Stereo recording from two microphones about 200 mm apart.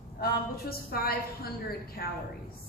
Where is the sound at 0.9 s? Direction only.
50° left (ahead or behind).